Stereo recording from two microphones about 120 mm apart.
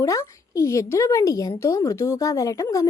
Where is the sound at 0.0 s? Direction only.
25° left (ahead or behind).